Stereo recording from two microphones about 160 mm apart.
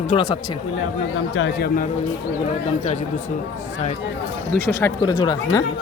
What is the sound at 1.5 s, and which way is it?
Speech, 85° left.